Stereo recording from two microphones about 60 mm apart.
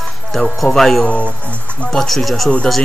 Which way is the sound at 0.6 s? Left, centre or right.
Centre.